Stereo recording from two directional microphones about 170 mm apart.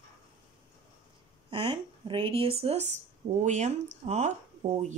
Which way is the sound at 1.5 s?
30° right (ahead or behind).